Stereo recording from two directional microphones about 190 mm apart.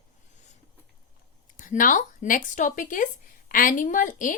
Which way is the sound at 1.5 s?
45° left (ahead or behind).